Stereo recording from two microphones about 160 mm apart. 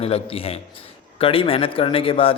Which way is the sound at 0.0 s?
35° left (ahead or behind).